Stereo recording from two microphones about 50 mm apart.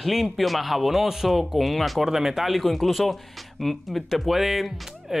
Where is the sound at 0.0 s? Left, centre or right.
Centre.